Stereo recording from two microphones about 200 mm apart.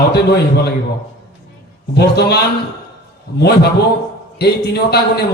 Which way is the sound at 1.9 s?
55° left (ahead or behind).